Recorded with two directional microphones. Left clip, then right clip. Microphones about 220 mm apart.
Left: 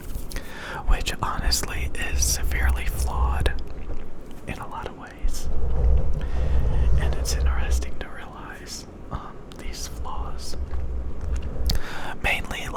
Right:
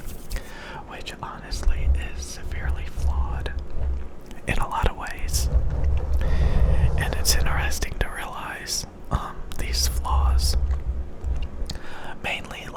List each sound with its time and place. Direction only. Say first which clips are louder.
0.3 s whispering: left 4 dB; 10° left (ahead or behind)
4.4 s whispering: right 8 dB; 15° right (ahead or behind)
11.7 s whispering: left 5 dB; 15° left (ahead or behind)